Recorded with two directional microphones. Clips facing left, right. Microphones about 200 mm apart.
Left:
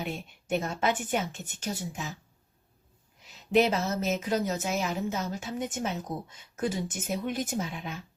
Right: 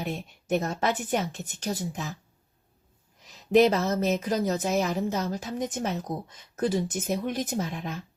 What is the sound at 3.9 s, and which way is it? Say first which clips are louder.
A woman's voice: right 3 dB; 35° right (ahead or behind).